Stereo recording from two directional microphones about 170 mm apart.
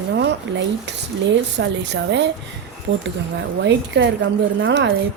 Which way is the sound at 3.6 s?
90° right.